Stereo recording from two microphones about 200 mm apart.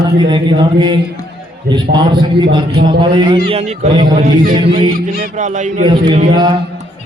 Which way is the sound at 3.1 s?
25° right (ahead or behind).